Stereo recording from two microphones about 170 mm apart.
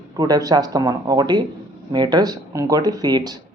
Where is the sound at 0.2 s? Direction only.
20° right (ahead or behind).